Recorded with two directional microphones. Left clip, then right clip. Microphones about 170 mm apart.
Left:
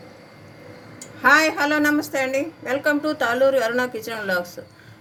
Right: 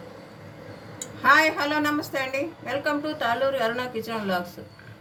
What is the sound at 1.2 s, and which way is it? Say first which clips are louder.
A woman's voice: left 3 dB; 55° left (ahead or behind).